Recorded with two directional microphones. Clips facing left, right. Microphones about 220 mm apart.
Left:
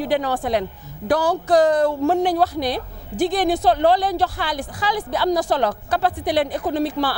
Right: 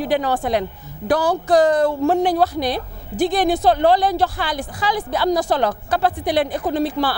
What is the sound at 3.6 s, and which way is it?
A woman's voice, 20° right (ahead or behind).